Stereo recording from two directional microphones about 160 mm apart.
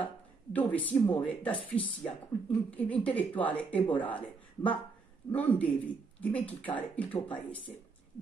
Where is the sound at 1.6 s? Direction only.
35° left (ahead or behind).